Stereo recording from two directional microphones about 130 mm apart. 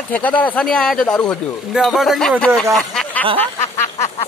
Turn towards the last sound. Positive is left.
turn(degrees=65)  # may be behind; listen again after turning